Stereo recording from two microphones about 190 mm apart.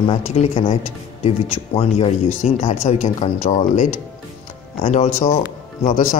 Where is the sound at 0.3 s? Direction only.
35° left (ahead or behind).